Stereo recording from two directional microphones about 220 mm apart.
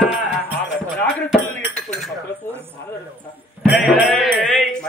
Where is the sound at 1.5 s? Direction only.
Centre (ahead or behind).